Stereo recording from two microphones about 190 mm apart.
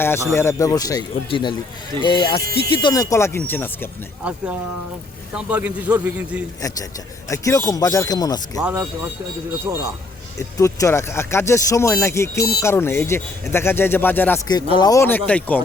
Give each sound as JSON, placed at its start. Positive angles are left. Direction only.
{"t": 0.0, "sound": "speech", "side_deg": 10}
{"t": 4.2, "sound": "a man's voice", "side_deg": -5}
{"t": 6.6, "sound": "speech", "side_deg": 20}
{"t": 8.6, "sound": "a man's voice", "side_deg": -10}
{"t": 10.3, "sound": "speech", "side_deg": 15}
{"t": 14.4, "sound": "speech", "side_deg": 20}